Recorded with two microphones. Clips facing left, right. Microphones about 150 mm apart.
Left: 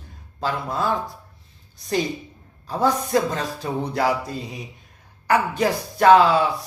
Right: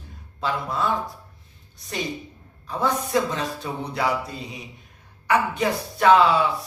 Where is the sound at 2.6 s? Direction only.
35° left (ahead or behind).